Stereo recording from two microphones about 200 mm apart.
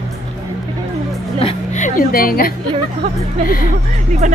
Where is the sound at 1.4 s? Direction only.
30° left (ahead or behind).